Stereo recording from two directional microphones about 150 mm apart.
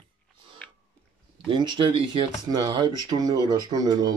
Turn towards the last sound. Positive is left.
turn(degrees=-25)  # may be behind; listen again after turning